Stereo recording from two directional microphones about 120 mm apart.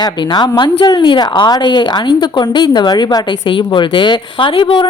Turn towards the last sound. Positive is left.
turn(degrees=45)  # may be behind; listen again after turning